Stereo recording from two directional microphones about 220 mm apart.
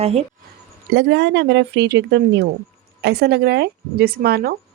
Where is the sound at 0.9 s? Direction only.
50° right (ahead or behind).